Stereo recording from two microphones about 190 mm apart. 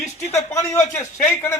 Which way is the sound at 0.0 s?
35° left (ahead or behind).